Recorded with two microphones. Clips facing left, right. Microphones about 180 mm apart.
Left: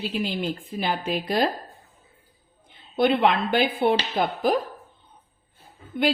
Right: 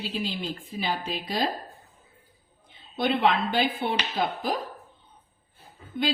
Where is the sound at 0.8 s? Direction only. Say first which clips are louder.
Left 4 dB; 55° left (ahead or behind).